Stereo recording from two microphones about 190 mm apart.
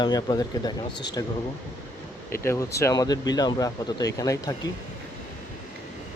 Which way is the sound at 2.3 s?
15° left (ahead or behind).